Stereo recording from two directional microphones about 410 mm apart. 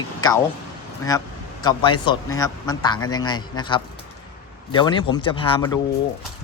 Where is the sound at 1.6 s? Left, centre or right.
Centre.